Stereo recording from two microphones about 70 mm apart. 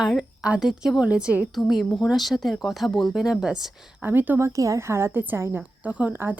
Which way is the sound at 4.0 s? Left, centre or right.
Right.